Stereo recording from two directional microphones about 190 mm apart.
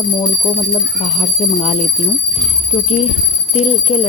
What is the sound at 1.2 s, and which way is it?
Speech, 30° left (ahead or behind).